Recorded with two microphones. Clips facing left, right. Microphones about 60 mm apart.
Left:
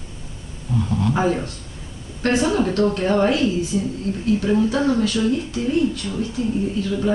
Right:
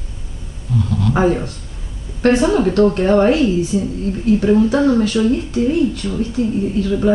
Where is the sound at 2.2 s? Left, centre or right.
Right.